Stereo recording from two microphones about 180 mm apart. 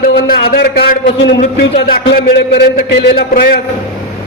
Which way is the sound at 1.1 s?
90° left.